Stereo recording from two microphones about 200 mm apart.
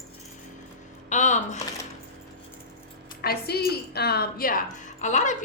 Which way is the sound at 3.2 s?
50° left (ahead or behind).